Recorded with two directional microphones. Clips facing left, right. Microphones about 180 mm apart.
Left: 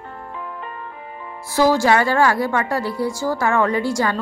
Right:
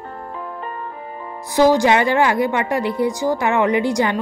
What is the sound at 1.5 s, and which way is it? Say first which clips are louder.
A woman's voice: right 2 dB; 20° right (ahead or behind).